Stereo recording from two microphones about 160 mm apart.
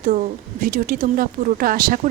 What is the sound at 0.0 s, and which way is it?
Speech, 55° right (ahead or behind).